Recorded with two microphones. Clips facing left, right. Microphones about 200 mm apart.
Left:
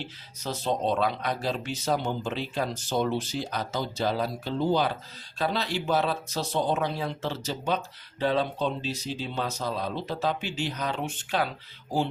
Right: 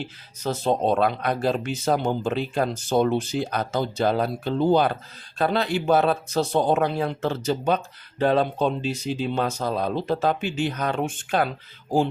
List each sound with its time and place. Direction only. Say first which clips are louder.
0.0 s speech: right 6 dB; 50° right (ahead or behind)